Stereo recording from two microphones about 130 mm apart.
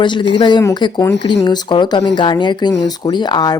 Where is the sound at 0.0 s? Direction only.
35° left (ahead or behind).